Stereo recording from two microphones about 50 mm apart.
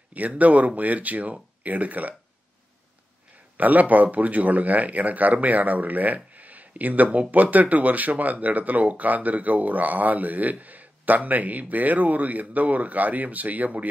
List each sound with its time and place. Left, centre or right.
0.4 s speech: right
3.5 s speech: right